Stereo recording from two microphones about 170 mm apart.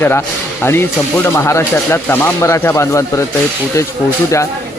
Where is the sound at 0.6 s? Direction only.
15° left (ahead or behind).